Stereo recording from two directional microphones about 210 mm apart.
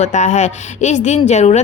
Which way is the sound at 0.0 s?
35° left (ahead or behind).